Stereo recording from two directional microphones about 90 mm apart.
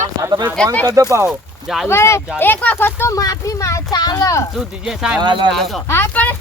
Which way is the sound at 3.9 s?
50° left (ahead or behind).